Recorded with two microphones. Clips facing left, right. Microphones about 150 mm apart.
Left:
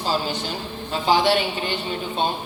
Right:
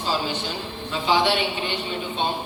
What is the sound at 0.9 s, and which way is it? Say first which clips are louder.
Speech: left 2 dB; 40° left (ahead or behind).